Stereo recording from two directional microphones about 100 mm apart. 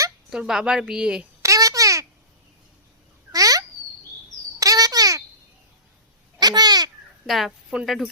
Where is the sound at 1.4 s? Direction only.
35° right (ahead or behind).